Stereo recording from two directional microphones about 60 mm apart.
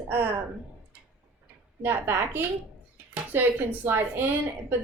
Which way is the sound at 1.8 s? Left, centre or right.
Right.